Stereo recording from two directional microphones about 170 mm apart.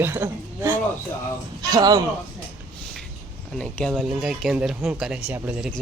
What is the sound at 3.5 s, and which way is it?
Speech, 5° left (ahead or behind).